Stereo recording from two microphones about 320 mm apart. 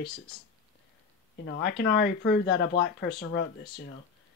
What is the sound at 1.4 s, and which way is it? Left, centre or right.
Speech, left.